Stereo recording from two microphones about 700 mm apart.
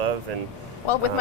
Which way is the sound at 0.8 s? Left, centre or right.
Left.